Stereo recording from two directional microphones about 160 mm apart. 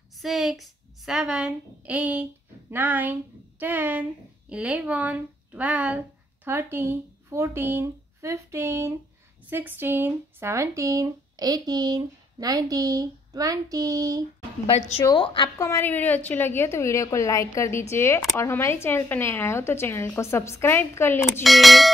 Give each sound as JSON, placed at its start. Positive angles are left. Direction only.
{"t": 0.2, "sound": "a woman's voice", "side_deg": 0}
{"t": 15.1, "sound": "a woman's voice", "side_deg": 30}
{"t": 21.4, "sound": "a woman's voice", "side_deg": 0}